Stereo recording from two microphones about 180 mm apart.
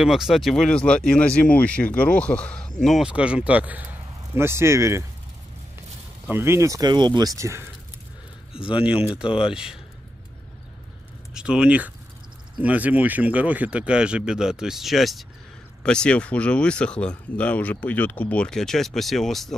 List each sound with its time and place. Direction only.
0.0 s speech: centre (ahead or behind)
6.2 s speech: 15° right (ahead or behind)
11.3 s speech: 5° right (ahead or behind)